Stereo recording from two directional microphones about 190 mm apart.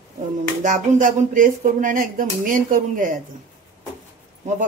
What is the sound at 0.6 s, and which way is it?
Speech, 40° right (ahead or behind).